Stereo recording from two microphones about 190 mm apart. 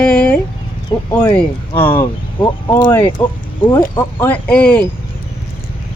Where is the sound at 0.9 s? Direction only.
20° left (ahead or behind).